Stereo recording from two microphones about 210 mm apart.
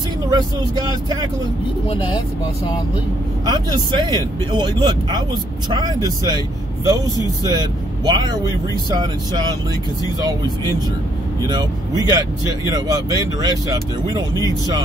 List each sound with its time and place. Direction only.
0.3 s speech: 20° right (ahead or behind)
1.9 s speech: 20° left (ahead or behind)
3.4 s speech: 20° right (ahead or behind)
8.1 s speech: 20° right (ahead or behind)
12.7 s speech: 15° right (ahead or behind)
14.0 s speech: 15° left (ahead or behind)